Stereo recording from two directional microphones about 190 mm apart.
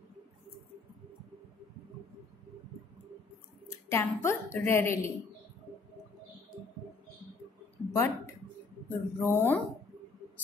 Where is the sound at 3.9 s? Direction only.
15° left (ahead or behind).